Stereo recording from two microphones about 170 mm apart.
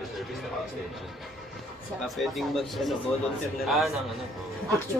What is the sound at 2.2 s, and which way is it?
A man's voice, centre (ahead or behind).